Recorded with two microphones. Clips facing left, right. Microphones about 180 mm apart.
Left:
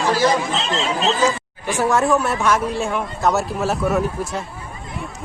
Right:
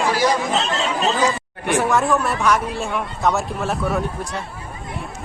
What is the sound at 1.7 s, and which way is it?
A man's voice, centre (ahead or behind).